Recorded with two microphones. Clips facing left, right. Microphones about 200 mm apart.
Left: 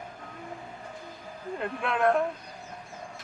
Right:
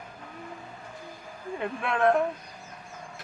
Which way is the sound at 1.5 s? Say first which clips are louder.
Right 1 dB; centre (ahead or behind).